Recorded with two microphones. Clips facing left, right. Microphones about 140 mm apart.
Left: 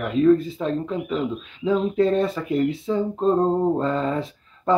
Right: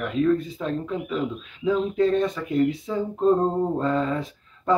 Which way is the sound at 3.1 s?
25° left (ahead or behind).